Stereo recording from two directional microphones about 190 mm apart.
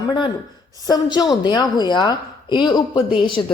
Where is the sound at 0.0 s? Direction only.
20° left (ahead or behind).